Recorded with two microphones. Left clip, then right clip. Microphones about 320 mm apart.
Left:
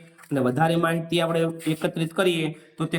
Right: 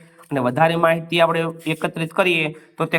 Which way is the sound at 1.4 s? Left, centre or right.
Right.